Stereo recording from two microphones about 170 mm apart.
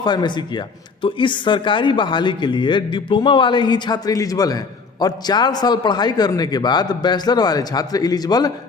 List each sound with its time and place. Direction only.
0.0 s speech: 25° left (ahead or behind)